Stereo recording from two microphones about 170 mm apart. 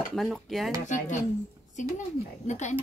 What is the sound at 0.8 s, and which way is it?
Speech, 45° left (ahead or behind).